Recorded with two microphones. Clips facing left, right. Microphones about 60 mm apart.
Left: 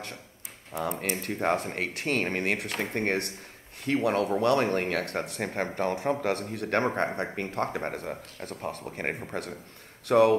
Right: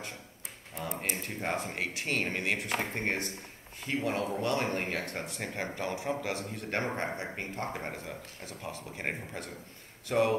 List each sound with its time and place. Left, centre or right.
1.0 s speech: left